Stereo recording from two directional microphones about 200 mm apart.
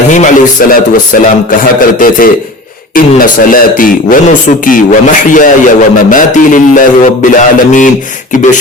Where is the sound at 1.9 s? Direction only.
45° left (ahead or behind).